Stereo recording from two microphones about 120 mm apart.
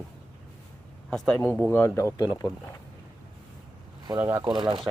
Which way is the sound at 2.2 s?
35° left (ahead or behind).